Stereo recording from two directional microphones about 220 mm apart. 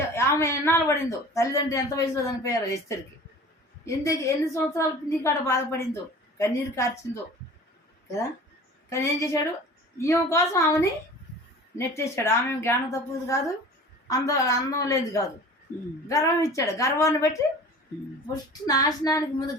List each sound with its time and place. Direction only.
0.1 s speech: 10° left (ahead or behind)
8.9 s speech: 15° left (ahead or behind)
18.6 s speech: 15° left (ahead or behind)